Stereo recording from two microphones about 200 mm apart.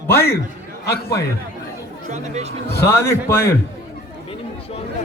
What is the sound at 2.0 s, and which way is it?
Speech, 35° right (ahead or behind).